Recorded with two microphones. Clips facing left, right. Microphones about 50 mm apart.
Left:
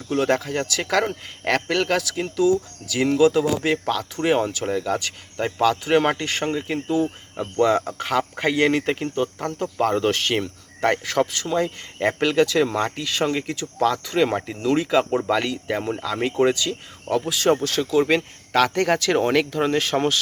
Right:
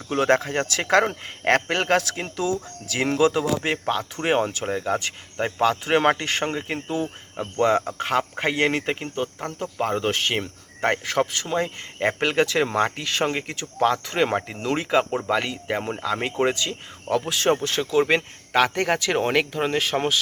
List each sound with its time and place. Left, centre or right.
0.1 s speech: right
3.6 s speech: right
8.9 s speech: centre
15.3 s speech: centre